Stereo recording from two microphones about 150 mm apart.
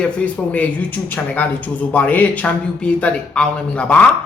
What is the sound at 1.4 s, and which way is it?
A man's voice, 10° left (ahead or behind).